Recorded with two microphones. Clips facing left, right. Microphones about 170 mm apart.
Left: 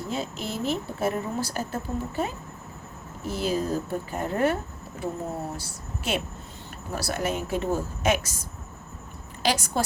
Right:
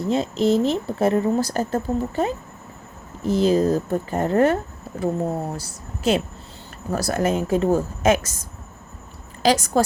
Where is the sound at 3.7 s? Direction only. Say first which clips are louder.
Right 6 dB; 45° right (ahead or behind).